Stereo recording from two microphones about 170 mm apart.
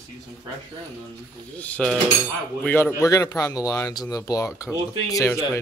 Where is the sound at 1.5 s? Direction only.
5° left (ahead or behind).